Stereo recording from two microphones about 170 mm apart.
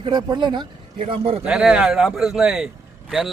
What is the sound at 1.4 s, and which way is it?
Speech, 5° right (ahead or behind).